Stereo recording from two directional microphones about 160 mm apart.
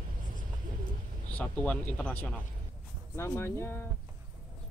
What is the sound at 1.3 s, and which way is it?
Speech, 10° left (ahead or behind).